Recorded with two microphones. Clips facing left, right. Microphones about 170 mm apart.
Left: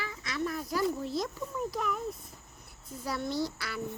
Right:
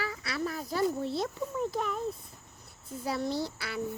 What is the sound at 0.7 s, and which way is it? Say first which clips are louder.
A child's voice: right 2 dB; 30° right (ahead or behind).